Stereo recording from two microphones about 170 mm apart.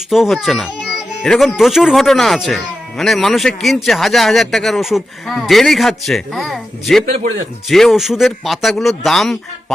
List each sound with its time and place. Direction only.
0.1 s speech: centre (ahead or behind)